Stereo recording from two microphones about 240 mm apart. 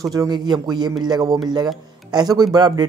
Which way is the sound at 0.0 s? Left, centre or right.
Centre.